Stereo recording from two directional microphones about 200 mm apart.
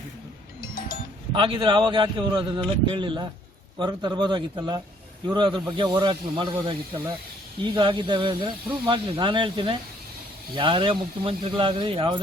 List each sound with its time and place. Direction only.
1.3 s speech: 25° right (ahead or behind)